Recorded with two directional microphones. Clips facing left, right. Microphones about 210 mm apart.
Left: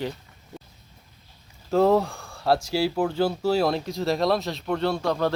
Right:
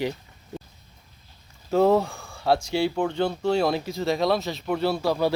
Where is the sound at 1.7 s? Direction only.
Centre (ahead or behind).